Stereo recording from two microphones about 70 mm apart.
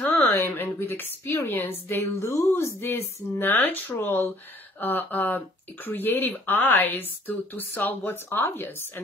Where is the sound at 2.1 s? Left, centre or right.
Left.